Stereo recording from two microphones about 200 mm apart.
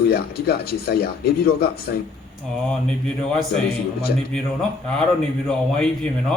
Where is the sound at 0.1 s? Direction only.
50° left (ahead or behind).